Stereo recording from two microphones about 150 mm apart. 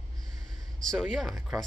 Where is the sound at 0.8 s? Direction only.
5° left (ahead or behind).